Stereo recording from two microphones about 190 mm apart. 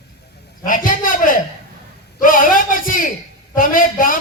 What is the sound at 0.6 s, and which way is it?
Speech, 45° left (ahead or behind).